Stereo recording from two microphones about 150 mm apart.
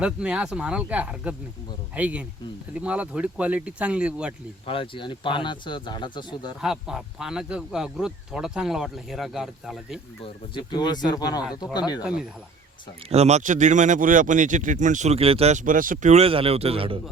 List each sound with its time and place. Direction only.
0.0 s speech: 5° right (ahead or behind)
4.6 s speech: 35° left (ahead or behind)
6.6 s speech: 5° right (ahead or behind)
10.5 s speech: 30° left (ahead or behind)
13.1 s speech: 45° right (ahead or behind)